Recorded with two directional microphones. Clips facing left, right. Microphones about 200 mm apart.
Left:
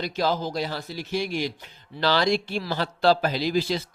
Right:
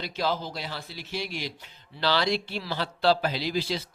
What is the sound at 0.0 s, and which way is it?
Speech, 45° left (ahead or behind).